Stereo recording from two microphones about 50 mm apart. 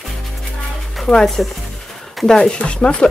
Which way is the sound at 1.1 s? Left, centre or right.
Centre.